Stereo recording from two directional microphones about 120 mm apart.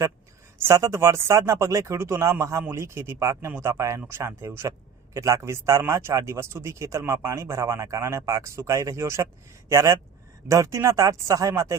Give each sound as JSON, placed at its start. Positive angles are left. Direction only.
{"t": 0.6, "sound": "speech", "side_deg": -25}